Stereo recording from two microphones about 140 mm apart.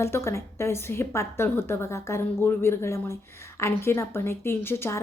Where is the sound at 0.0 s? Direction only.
20° left (ahead or behind).